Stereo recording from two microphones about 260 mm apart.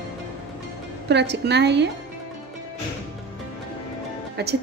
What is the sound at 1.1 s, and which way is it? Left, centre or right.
Speech, right.